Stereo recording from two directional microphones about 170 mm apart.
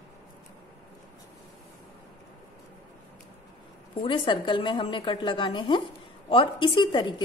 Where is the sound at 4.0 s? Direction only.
30° left (ahead or behind).